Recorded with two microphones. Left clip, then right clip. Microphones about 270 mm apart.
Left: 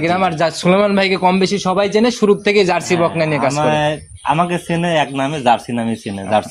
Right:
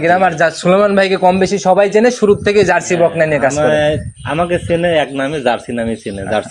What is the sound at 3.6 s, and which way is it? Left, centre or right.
A man's voice, left.